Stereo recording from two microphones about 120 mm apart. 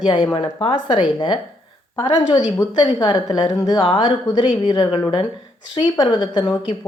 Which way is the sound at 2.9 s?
35° left (ahead or behind).